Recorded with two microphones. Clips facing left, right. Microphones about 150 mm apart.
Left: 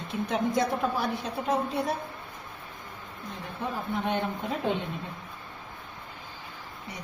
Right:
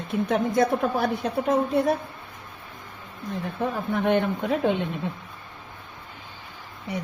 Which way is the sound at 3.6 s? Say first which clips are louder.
Right 5 dB; 60° right (ahead or behind).